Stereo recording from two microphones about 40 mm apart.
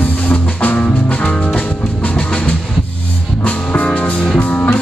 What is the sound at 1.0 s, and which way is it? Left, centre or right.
Music, left.